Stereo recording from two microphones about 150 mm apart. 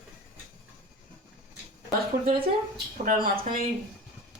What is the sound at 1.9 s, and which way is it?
Speech, 80° right.